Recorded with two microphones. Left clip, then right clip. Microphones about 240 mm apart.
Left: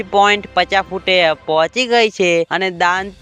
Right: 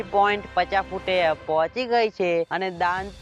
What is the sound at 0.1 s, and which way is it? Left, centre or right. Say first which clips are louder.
Speech: left 8 dB; left.